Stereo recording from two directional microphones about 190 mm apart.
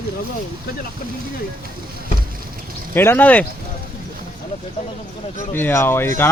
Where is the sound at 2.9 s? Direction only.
10° left (ahead or behind).